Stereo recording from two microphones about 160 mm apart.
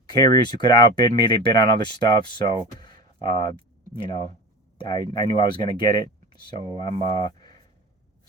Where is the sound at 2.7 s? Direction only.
30° left (ahead or behind).